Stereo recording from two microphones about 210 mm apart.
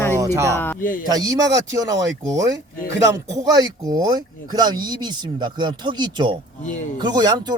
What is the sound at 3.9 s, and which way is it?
Speech, 20° right (ahead or behind).